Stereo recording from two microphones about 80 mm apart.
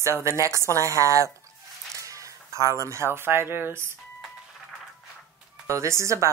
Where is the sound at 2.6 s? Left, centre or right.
Right.